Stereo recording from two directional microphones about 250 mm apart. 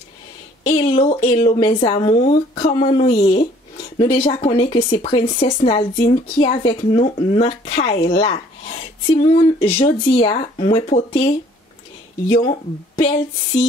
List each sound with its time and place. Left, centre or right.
0.7 s a woman's voice: left